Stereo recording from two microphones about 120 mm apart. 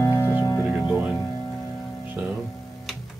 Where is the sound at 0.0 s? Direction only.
20° left (ahead or behind).